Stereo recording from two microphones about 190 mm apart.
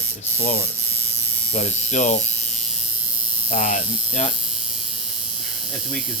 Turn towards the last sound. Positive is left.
turn(degrees=40)  # may be behind; listen again after turning